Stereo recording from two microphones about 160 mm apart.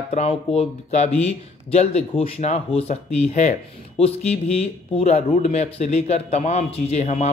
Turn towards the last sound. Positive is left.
turn(degrees=45)  # may be behind; listen again after turning